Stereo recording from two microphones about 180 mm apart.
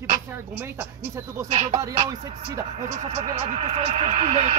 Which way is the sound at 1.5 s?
35° right (ahead or behind).